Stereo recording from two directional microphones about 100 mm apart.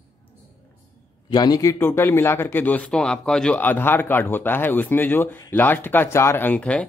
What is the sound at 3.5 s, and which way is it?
A man's voice, 20° left (ahead or behind).